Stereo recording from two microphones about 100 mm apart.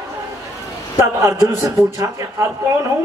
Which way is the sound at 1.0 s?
30° right (ahead or behind).